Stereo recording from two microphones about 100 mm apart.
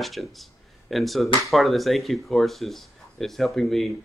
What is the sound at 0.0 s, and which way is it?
Speech, centre (ahead or behind).